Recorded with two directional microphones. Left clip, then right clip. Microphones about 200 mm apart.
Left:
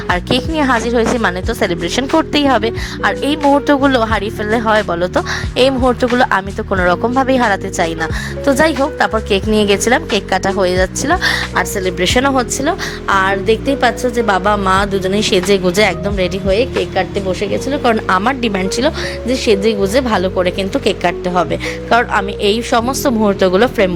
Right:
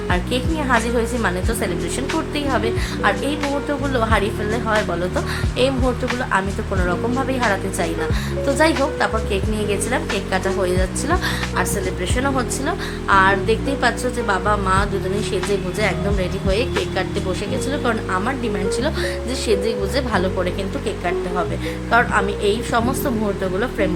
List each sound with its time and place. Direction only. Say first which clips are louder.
0.1 s a woman's voice: left 7 dB; 50° left (ahead or behind)
16.9 s speech: left 6 dB; 30° left (ahead or behind)
18.1 s a woman's voice: left 8 dB; 45° left (ahead or behind)